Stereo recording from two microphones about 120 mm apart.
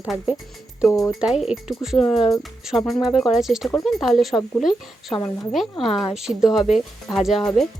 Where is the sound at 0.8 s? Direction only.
25° left (ahead or behind).